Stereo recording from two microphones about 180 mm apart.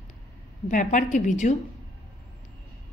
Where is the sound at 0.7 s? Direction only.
45° left (ahead or behind).